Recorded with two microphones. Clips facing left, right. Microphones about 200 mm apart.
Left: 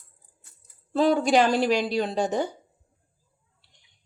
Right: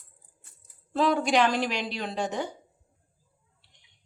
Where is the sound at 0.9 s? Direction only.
35° left (ahead or behind).